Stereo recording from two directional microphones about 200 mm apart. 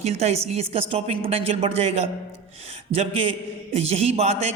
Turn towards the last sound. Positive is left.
turn(degrees=-35)  # may be behind; listen again after turning